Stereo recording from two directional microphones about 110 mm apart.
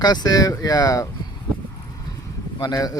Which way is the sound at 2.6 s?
35° left (ahead or behind).